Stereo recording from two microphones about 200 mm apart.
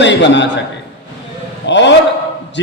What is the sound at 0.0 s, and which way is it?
Speech, 60° left (ahead or behind).